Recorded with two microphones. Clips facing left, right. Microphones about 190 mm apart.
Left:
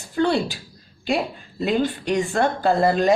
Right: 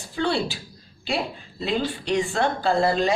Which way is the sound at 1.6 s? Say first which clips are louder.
Left 4 dB; 50° left (ahead or behind).